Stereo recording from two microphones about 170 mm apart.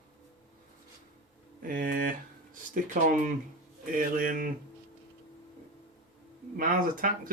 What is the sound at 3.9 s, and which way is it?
Speech, 55° right (ahead or behind).